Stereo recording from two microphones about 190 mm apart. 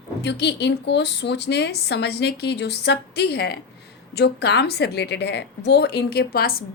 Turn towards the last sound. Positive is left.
turn(degrees=50)  # may be behind; listen again after turning